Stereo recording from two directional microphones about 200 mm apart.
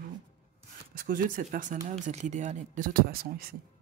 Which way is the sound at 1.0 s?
45° right (ahead or behind).